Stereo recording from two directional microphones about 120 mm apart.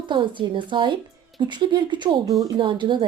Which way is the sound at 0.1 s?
40° right (ahead or behind).